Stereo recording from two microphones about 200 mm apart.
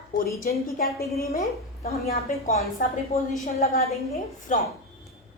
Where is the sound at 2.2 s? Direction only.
40° left (ahead or behind).